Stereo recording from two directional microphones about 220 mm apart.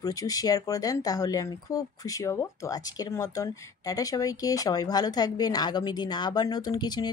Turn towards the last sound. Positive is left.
turn(degrees=20)  # may be behind; listen again after turning